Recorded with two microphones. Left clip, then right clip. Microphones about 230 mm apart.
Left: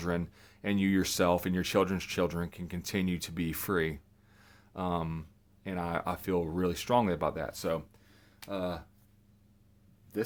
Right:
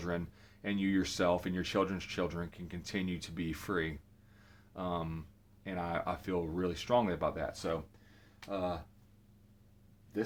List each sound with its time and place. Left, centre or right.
0.0 s speech: left
4.4 s a sound: left
5.6 s speech: left